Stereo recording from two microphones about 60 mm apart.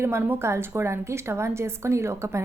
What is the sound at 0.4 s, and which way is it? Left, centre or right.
A woman's voice, right.